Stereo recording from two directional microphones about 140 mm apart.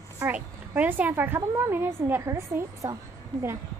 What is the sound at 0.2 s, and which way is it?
A woman's voice, 10° right (ahead or behind).